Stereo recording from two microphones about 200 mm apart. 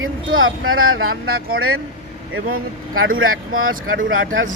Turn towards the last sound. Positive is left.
turn(degrees=-80)